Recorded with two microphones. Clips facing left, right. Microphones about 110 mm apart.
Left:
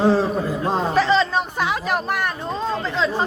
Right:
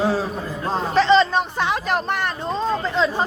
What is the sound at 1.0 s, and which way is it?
Speech, centre (ahead or behind).